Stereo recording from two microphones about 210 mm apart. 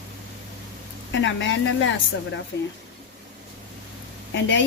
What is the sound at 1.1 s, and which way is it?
Speech, 60° left (ahead or behind).